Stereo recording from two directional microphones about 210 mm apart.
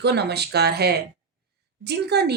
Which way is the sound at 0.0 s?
50° right (ahead or behind).